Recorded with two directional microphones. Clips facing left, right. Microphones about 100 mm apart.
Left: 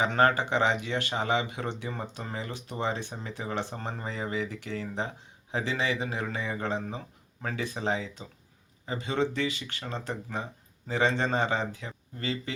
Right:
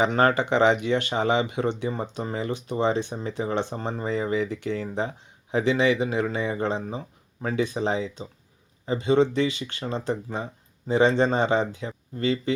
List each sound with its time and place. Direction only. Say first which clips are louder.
0.0 s speech: right 3 dB; 25° right (ahead or behind)
7.8 s speech: right 5 dB; 35° right (ahead or behind)